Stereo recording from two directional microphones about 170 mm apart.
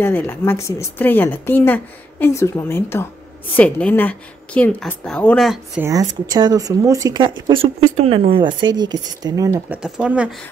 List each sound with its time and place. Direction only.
0.0 s speech: 10° left (ahead or behind)
5.8 s speech: 20° right (ahead or behind)
9.7 s speech: 5° right (ahead or behind)